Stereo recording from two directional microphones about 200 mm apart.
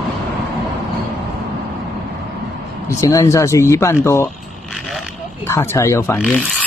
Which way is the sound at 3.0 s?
15° left (ahead or behind).